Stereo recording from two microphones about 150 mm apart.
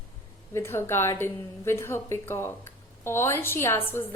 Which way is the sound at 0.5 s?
15° left (ahead or behind).